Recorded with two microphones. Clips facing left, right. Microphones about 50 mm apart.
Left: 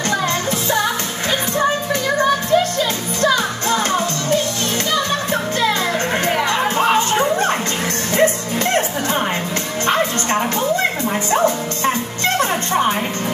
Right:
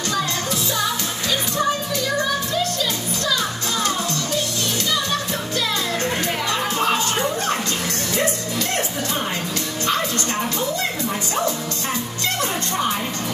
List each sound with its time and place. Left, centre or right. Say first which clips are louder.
3.2 s music: left 8 dB; left
6.8 s music: left 5 dB; left
11.3 s music: left 8 dB; left